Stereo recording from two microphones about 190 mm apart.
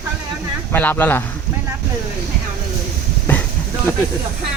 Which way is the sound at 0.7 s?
10° left (ahead or behind).